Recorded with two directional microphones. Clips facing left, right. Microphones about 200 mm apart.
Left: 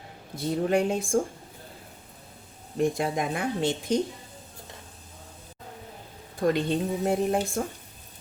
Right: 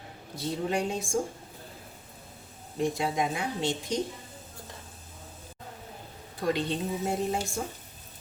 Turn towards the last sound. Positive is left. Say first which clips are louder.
# left 5 dB
turn(degrees=55)  # may be behind; listen again after turning